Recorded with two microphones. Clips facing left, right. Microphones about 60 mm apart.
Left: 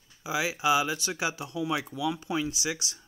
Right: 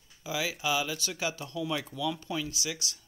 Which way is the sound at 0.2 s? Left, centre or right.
Centre.